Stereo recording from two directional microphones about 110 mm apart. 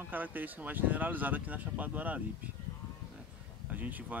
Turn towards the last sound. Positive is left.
turn(degrees=-15)  # may be behind; listen again after turning